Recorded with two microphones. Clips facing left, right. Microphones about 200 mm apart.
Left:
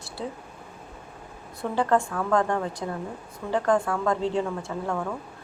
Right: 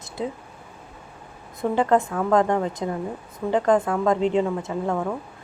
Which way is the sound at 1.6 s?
20° right (ahead or behind).